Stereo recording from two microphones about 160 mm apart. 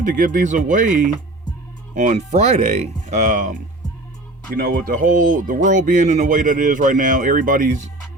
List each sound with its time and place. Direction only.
0.0 s speech: 55° right (ahead or behind)
4.5 s speech: 65° right (ahead or behind)